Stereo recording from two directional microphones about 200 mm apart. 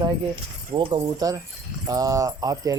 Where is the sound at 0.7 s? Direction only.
25° right (ahead or behind).